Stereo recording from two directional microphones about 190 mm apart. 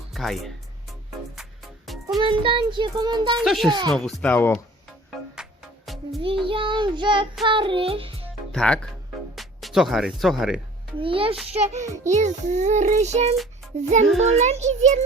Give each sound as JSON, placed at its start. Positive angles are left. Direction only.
{"t": 0.1, "sound": "speech", "side_deg": 0}
{"t": 1.4, "sound": "music", "side_deg": 0}
{"t": 2.2, "sound": "a child's voice", "side_deg": -25}
{"t": 3.4, "sound": "speech", "side_deg": 0}
{"t": 3.7, "sound": "a child's voice", "side_deg": -20}
{"t": 3.9, "sound": "speech", "side_deg": 5}
{"t": 5.4, "sound": "music", "side_deg": 0}
{"t": 6.2, "sound": "a child's voice", "side_deg": -30}
{"t": 8.5, "sound": "speech", "side_deg": 5}
{"t": 11.0, "sound": "a child's voice", "side_deg": -30}
{"t": 11.5, "sound": "child singing", "side_deg": -35}
{"t": 14.3, "sound": "child singing", "side_deg": -35}